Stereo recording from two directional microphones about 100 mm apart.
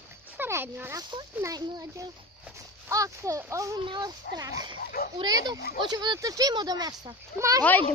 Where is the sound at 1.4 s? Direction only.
35° right (ahead or behind).